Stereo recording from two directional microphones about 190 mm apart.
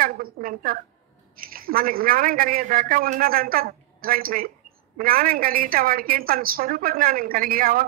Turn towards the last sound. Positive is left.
turn(degrees=-50)  # may be behind; listen again after turning